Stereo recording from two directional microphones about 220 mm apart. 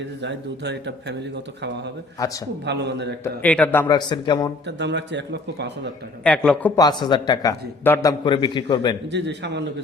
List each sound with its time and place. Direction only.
0.2 s a man's voice: 50° right (ahead or behind)
2.1 s speech: 15° left (ahead or behind)
2.6 s a man's voice: 50° right (ahead or behind)
3.4 s speech: 5° left (ahead or behind)
4.6 s a man's voice: 50° right (ahead or behind)
6.2 s speech: 5° left (ahead or behind)
6.8 s a man's voice: 20° left (ahead or behind)
9.1 s a man's voice: 50° right (ahead or behind)